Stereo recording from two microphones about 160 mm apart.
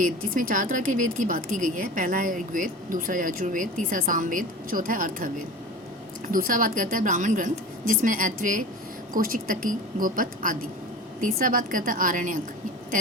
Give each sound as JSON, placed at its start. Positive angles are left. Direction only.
{"t": 0.0, "sound": "speech", "side_deg": -55}